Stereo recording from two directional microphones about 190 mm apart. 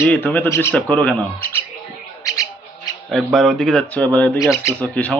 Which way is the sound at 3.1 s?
Centre (ahead or behind).